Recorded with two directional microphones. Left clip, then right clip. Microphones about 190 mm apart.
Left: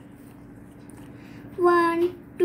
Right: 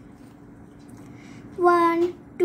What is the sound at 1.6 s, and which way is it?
Speech, 20° right (ahead or behind).